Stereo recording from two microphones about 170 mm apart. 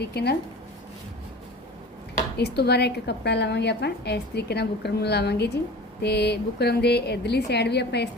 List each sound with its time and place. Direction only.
0.0 s a woman's voice: 70° left (ahead or behind)
2.4 s a woman's voice: 75° left (ahead or behind)